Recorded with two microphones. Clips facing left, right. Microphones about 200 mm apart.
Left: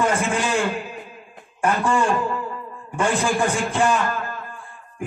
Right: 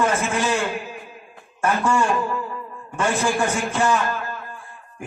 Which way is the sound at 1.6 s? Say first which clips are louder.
Even; 15° left (ahead or behind).